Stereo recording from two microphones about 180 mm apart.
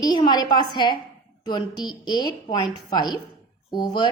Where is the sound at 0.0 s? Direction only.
25° left (ahead or behind).